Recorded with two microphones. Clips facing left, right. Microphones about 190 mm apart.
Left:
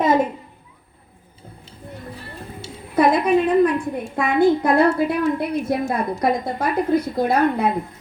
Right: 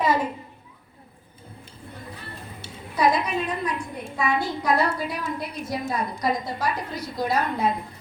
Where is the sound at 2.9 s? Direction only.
55° left (ahead or behind).